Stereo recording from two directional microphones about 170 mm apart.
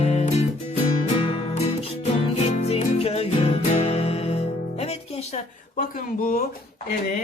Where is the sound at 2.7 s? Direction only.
35° left (ahead or behind).